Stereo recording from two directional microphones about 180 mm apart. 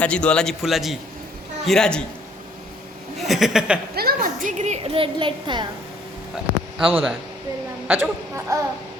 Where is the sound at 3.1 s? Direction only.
Centre (ahead or behind).